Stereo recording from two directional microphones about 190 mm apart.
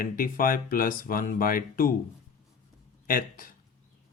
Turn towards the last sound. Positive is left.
turn(degrees=50)  # may be behind; listen again after turning